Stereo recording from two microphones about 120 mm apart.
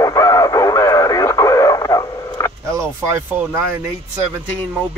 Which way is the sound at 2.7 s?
25° right (ahead or behind).